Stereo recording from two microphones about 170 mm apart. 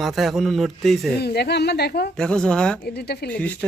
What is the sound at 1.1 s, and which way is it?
Speech, 70° left (ahead or behind).